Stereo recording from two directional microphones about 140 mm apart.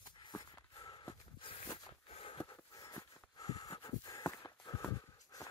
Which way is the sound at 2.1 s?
40° left (ahead or behind).